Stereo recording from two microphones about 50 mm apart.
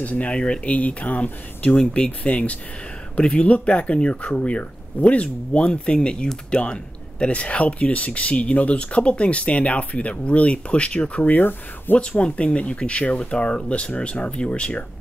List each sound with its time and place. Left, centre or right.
0.0 s speech: left
11.2 s speech: left
12.0 s speech: centre